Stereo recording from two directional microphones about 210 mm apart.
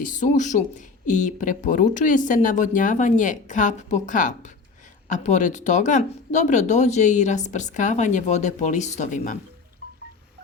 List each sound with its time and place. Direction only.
0.0 s speech: 35° left (ahead or behind)